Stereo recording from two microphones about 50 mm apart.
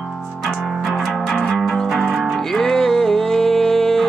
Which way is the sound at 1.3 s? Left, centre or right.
Centre.